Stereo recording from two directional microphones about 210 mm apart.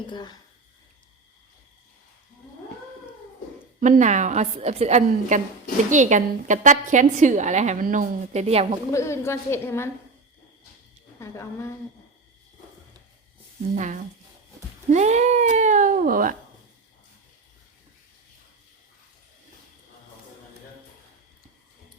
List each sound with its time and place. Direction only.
0.1 s speech: 20° left (ahead or behind)
3.8 s a woman's voice: 35° right (ahead or behind)
8.9 s a woman's voice: 15° left (ahead or behind)
11.2 s a woman's voice: 15° left (ahead or behind)
13.7 s a woman's voice: 35° right (ahead or behind)